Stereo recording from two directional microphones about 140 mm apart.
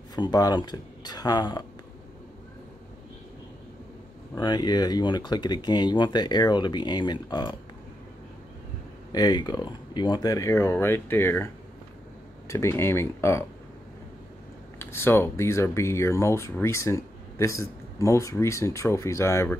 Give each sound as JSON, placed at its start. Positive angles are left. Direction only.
{"t": 0.1, "sound": "speech", "side_deg": 30}
{"t": 4.4, "sound": "speech", "side_deg": 30}
{"t": 9.1, "sound": "speech", "side_deg": 30}
{"t": 14.8, "sound": "speech", "side_deg": 15}